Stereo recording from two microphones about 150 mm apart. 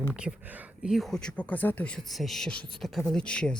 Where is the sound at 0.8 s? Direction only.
Centre (ahead or behind).